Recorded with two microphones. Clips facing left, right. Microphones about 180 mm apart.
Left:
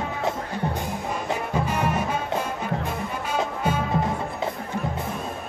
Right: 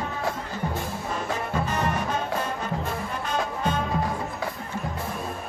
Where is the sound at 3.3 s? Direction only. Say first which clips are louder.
Left 2 dB; 10° left (ahead or behind).